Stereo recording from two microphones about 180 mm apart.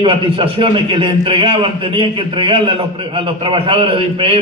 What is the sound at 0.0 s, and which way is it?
A man's voice, 30° right (ahead or behind).